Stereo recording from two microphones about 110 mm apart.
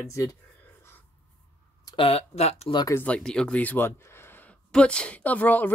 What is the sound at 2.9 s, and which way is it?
Speech, 20° left (ahead or behind).